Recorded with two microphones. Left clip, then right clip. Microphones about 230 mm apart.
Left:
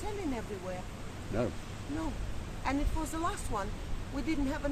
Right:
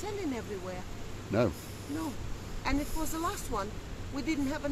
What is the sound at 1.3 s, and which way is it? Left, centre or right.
Speech, right.